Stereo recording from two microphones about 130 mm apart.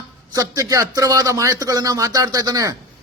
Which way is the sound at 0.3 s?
25° right (ahead or behind).